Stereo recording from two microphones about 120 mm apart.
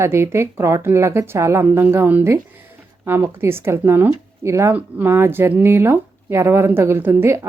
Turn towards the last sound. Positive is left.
turn(degrees=-20)  # may be behind; listen again after turning